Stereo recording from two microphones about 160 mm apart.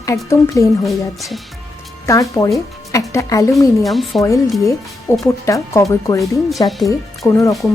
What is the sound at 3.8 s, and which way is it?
Speech, centre (ahead or behind).